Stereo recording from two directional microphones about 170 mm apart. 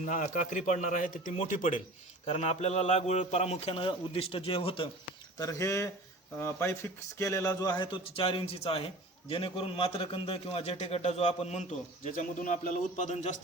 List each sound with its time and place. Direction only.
0.0 s a man's voice: 50° left (ahead or behind); by 4.9 s 35° left (ahead or behind)
5.4 s a man's voice: 20° left (ahead or behind); by 13.3 s 45° left (ahead or behind)